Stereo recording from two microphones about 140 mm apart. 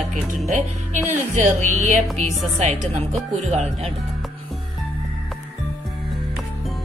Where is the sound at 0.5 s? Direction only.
60° right (ahead or behind).